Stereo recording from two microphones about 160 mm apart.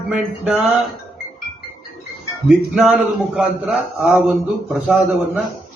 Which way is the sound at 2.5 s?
Centre (ahead or behind).